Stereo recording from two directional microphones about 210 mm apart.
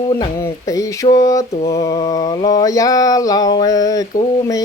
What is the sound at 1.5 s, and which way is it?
Mantra, 30° left (ahead or behind).